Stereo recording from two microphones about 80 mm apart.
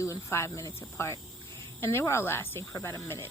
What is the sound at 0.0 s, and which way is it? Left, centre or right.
Speech, left.